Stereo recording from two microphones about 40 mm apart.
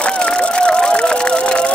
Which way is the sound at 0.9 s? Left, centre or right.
Left.